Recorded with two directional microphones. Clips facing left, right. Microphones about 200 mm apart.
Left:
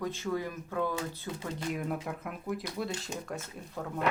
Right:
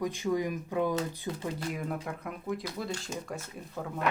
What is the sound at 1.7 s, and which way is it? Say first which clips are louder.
Speech: left 1 dB; centre (ahead or behind).